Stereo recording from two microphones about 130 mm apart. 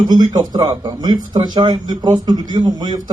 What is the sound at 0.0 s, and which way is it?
Speech, 35° right (ahead or behind).